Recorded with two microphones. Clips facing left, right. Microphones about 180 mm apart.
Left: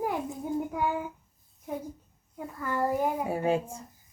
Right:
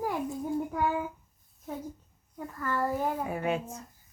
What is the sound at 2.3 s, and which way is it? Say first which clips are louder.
Speech: left 1 dB; 15° left (ahead or behind).